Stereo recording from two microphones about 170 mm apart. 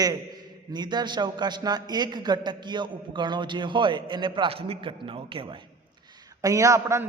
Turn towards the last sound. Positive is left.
turn(degrees=-15)  # may be behind; listen again after turning